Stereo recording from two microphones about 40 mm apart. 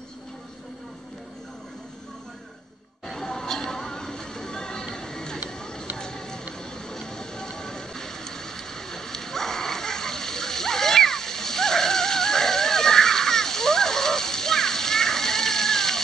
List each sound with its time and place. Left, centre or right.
3.1 s music: centre
4.9 s a sound: centre
5.9 s music: centre
6.6 s vehicle: centre